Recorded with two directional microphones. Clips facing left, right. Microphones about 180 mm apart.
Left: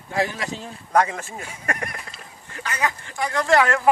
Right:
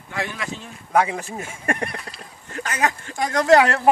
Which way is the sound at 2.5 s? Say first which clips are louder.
Right 3 dB; 45° right (ahead or behind).